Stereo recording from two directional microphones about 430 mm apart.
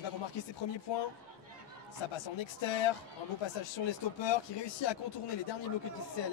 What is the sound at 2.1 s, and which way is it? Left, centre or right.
Speech, left.